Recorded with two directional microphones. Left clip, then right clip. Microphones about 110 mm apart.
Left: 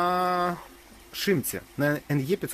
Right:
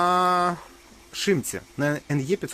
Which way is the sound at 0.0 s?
30° right (ahead or behind).